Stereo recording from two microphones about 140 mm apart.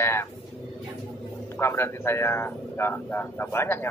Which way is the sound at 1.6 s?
20° left (ahead or behind).